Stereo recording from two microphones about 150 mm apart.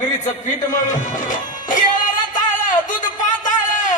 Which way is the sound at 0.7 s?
55° left (ahead or behind).